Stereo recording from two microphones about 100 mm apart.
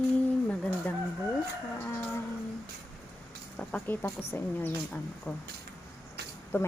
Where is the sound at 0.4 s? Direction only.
10° left (ahead or behind).